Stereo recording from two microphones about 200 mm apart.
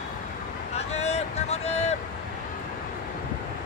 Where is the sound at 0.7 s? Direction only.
30° left (ahead or behind).